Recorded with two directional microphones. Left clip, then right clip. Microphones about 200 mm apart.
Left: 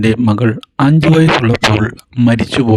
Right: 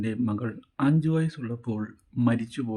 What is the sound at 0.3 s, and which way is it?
A man's voice, 55° left (ahead or behind).